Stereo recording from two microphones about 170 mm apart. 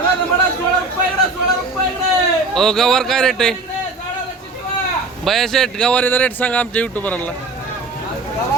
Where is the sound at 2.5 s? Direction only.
Centre (ahead or behind).